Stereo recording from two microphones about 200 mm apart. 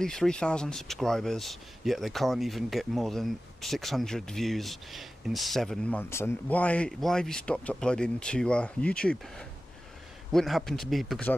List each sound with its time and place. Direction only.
0.0 s speech: 5° left (ahead or behind)